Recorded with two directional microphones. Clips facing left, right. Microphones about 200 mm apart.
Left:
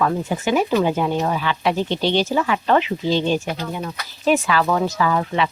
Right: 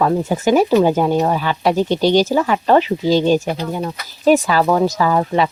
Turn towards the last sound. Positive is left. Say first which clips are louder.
# right 4 dB
turn(degrees=-35)  # may be behind; listen again after turning